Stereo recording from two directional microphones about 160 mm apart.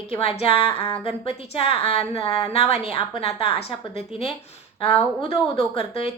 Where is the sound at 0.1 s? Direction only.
40° left (ahead or behind).